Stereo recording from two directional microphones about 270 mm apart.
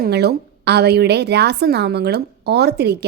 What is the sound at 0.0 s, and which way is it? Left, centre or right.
A woman's voice, right.